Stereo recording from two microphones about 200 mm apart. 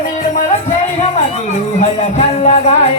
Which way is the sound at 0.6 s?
30° left (ahead or behind).